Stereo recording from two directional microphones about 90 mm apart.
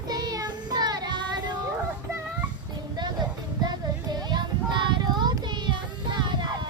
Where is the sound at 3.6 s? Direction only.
50° right (ahead or behind).